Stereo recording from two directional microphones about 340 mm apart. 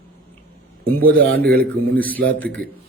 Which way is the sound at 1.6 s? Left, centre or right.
Centre.